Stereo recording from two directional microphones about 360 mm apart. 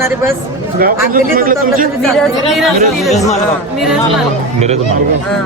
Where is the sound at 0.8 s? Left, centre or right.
Right.